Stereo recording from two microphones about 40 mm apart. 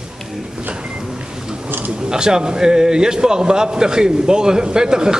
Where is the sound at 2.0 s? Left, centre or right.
Centre.